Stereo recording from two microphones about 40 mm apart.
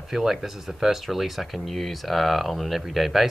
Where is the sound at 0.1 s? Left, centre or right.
Centre.